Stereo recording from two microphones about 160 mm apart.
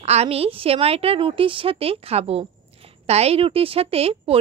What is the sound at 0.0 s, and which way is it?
A woman's voice, 40° right (ahead or behind).